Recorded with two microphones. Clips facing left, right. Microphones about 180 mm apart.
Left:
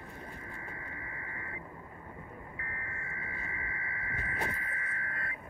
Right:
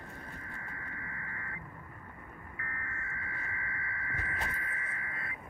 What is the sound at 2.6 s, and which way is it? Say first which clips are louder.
Radio: even; 25° left (ahead or behind).